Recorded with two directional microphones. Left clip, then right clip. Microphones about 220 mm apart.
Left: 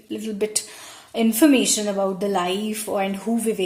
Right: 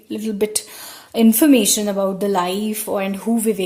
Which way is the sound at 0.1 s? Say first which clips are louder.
Right 4 dB; 40° right (ahead or behind).